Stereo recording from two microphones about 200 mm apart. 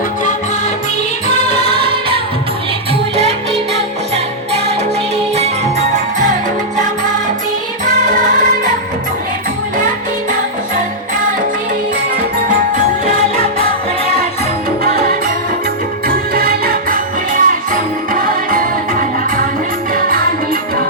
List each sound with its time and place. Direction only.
1.7 s music of asia: 25° right (ahead or behind)
7.9 s music: 40° right (ahead or behind)
16.0 s music: 50° right (ahead or behind)